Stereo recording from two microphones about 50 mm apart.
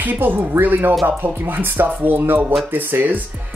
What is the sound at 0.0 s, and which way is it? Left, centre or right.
Speech, right.